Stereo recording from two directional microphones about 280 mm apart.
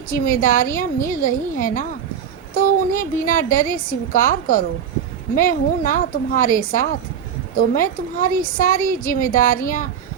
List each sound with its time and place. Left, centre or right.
0.1 s a woman's voice: left